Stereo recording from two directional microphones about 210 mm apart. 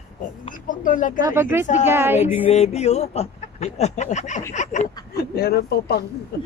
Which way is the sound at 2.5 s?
30° left (ahead or behind).